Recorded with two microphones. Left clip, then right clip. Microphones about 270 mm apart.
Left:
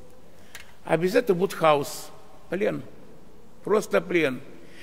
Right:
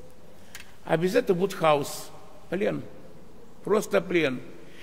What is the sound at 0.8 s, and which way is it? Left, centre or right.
A man's voice, centre.